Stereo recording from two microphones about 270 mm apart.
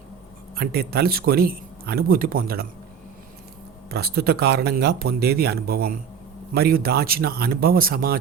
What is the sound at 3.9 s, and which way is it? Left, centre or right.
Speech, right.